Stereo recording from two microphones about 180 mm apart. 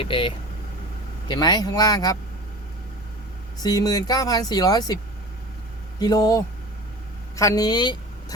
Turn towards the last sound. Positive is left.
turn(degrees=25)  # may be behind; listen again after turning